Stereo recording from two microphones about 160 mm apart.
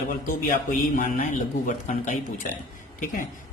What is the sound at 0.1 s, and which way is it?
Speech, 60° left (ahead or behind).